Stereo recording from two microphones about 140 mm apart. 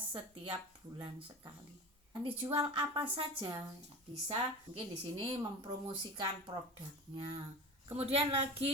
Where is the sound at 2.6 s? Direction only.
35° right (ahead or behind).